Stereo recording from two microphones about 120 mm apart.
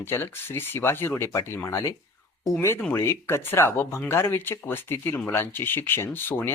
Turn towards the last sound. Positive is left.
turn(degrees=15)  # may be behind; listen again after turning